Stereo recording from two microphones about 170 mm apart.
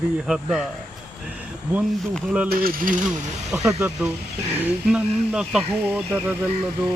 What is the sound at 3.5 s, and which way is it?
Speech, 15° right (ahead or behind).